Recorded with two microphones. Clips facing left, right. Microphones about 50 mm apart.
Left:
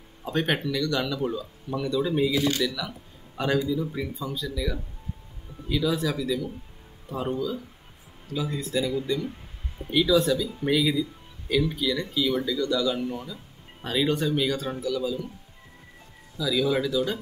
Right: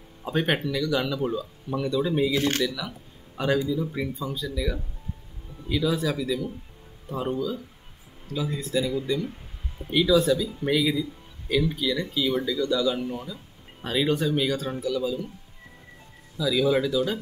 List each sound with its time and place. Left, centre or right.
0.2 s speech: centre
2.3 s speech: right
2.6 s speech: centre
5.7 s speech: centre
16.3 s speech: centre